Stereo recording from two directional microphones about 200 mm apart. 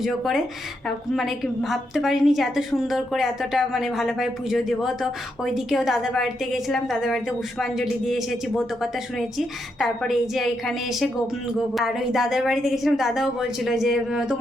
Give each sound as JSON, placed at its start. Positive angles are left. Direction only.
{"t": 0.0, "sound": "a woman's voice", "side_deg": 0}